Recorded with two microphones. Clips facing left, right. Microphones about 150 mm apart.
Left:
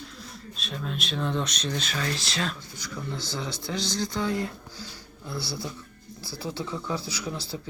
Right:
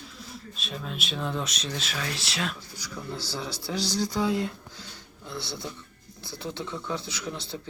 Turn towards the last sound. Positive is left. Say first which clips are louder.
# left 2 dB
turn(degrees=5)  # may be behind; listen again after turning